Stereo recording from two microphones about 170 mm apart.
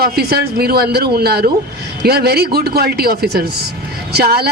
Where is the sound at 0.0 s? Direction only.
65° right (ahead or behind).